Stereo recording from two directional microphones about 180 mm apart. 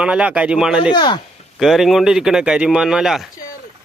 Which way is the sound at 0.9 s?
25° left (ahead or behind).